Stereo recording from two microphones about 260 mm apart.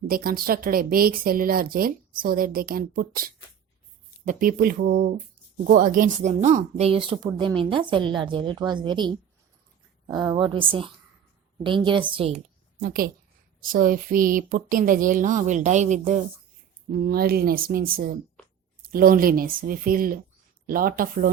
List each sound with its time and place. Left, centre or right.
0.1 s a woman's voice: right
12.8 s speech: right